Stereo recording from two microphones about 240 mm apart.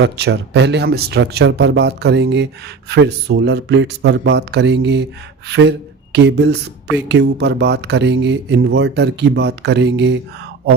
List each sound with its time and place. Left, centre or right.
0.0 s speech: right